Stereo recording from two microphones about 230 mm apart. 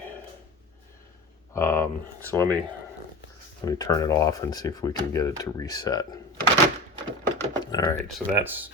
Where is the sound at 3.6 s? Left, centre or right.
Centre.